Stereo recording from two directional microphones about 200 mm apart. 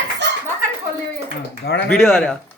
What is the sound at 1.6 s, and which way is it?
Speech, 55° left (ahead or behind).